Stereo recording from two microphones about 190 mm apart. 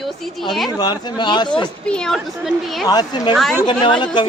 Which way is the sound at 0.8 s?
20° left (ahead or behind).